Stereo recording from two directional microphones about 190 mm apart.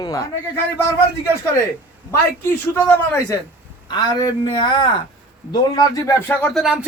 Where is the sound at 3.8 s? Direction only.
25° left (ahead or behind).